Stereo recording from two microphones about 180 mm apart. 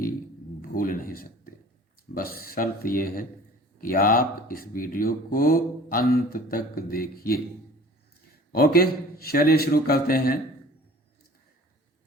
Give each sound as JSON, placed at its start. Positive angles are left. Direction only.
{"t": 0.6, "sound": "speech", "side_deg": 55}
{"t": 8.5, "sound": "a man's voice", "side_deg": 55}